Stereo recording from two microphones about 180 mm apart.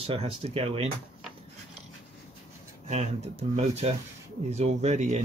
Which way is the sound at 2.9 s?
35° right (ahead or behind).